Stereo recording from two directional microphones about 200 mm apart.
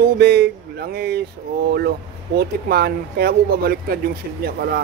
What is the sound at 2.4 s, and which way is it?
Speech, 55° right (ahead or behind).